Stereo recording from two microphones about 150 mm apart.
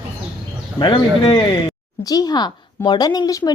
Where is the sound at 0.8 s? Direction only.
30° left (ahead or behind).